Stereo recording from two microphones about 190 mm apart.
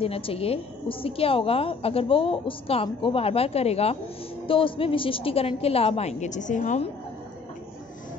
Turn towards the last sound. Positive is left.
turn(degrees=40)  # may be behind; listen again after turning